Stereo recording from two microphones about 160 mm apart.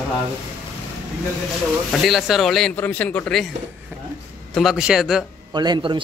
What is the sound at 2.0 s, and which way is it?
Speech, centre (ahead or behind).